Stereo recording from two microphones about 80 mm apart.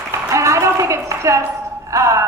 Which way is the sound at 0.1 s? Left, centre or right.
Right.